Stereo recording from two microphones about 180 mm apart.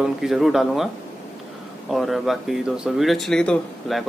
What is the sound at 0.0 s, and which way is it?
Speech, centre (ahead or behind).